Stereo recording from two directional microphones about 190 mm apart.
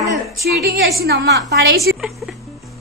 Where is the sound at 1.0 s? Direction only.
60° right (ahead or behind).